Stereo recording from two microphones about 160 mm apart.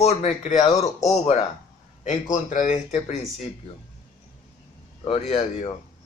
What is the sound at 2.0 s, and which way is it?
Speech, 55° left (ahead or behind).